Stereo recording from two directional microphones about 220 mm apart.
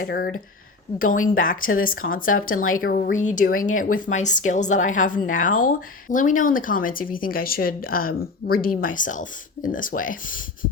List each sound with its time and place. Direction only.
0.0 s speech: 45° left (ahead or behind)